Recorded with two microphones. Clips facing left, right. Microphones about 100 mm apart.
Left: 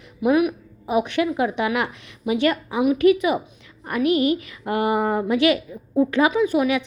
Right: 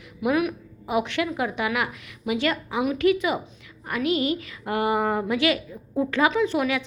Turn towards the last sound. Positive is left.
turn(degrees=15)  # may be behind; listen again after turning